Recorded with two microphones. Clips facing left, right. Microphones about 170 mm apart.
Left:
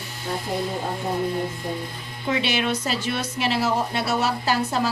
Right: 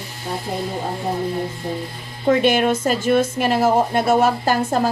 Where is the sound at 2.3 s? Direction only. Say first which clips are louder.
Right 8 dB; 50° right (ahead or behind).